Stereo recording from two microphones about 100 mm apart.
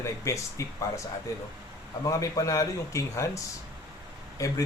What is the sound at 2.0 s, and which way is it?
Speech, 35° left (ahead or behind).